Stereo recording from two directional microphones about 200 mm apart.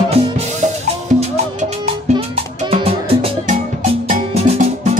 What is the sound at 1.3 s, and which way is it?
Music, 35° right (ahead or behind).